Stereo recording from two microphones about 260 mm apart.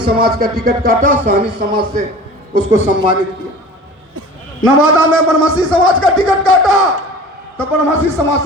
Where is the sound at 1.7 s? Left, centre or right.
Centre.